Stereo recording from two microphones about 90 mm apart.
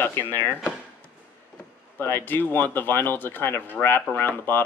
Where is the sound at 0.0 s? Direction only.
20° left (ahead or behind).